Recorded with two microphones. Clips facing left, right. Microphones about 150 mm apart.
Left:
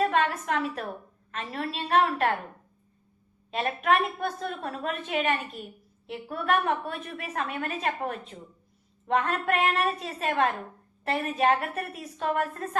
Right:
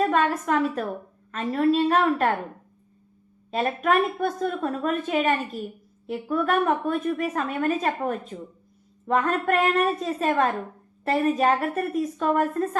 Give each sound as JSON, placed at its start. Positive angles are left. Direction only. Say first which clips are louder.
{"t": 0.0, "sound": "a woman's voice", "louder": "right 3 dB", "side_deg": -40}
{"t": 3.5, "sound": "a woman's voice", "louder": "right 3 dB", "side_deg": -40}